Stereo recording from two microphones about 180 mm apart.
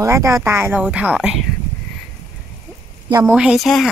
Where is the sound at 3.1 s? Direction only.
15° right (ahead or behind).